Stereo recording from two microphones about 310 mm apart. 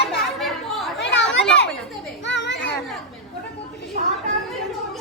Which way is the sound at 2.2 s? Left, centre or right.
Left.